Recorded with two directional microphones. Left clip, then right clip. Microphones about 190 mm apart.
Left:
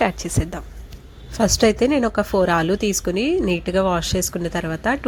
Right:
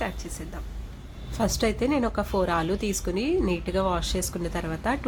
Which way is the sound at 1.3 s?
30° left (ahead or behind).